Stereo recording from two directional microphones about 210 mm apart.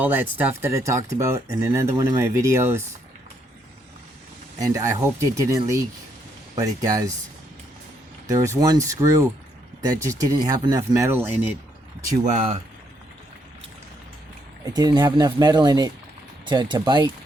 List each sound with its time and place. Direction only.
0.0 s speech: 10° right (ahead or behind)
4.6 s speech: 15° right (ahead or behind)
8.3 s speech: 15° right (ahead or behind)
12.2 s speech: 35° right (ahead or behind)
14.6 s speech: 20° right (ahead or behind)